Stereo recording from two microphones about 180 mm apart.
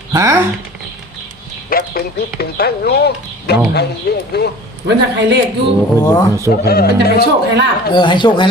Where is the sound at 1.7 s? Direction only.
55° left (ahead or behind).